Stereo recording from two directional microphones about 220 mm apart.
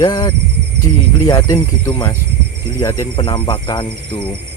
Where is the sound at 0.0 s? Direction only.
15° left (ahead or behind).